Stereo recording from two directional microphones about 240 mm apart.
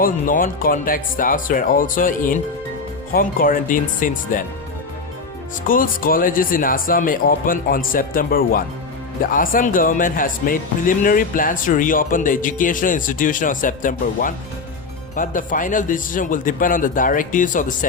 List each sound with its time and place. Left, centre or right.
0.0 s speech: left
5.6 s speech: left